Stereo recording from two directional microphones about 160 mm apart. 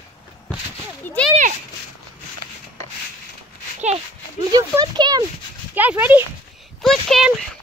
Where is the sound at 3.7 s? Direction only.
45° right (ahead or behind).